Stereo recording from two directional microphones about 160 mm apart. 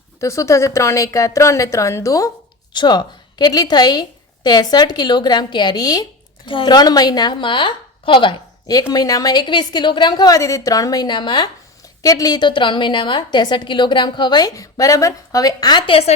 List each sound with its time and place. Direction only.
0.2 s a woman's voice: 20° left (ahead or behind)